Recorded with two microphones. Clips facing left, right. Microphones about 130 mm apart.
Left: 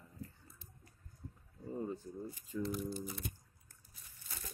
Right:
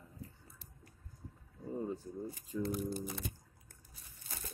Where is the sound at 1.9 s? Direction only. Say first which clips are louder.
Right 2 dB; 20° right (ahead or behind).